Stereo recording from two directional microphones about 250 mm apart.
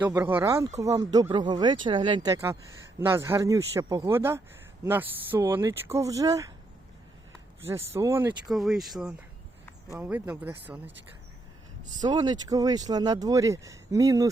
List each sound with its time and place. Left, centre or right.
0.0 s speech: centre
7.9 s speech: centre
11.9 s speech: centre